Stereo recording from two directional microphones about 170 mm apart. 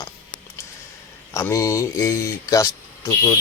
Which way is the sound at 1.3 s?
15° left (ahead or behind).